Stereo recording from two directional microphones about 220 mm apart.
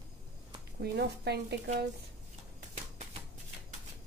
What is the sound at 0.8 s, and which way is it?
Speech, 50° right (ahead or behind).